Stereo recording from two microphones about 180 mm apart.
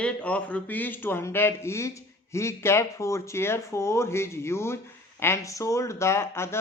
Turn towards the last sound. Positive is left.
turn(degrees=15)  # may be behind; listen again after turning